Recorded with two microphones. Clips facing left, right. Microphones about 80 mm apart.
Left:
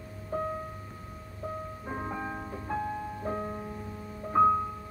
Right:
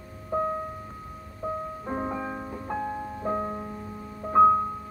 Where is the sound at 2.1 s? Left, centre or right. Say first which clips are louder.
Right 3 dB; centre.